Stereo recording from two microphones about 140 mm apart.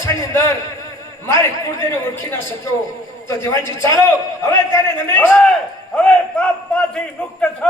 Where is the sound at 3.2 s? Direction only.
20° left (ahead or behind).